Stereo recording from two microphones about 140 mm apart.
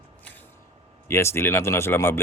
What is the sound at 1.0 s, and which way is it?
Speech, 20° left (ahead or behind).